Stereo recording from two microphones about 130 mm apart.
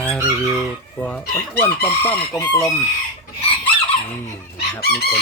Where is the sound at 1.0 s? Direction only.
10° left (ahead or behind).